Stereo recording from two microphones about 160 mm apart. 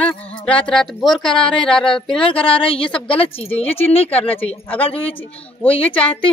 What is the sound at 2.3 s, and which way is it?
Speech, 35° left (ahead or behind).